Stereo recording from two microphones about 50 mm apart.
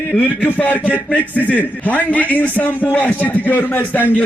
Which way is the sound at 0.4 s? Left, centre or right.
Left.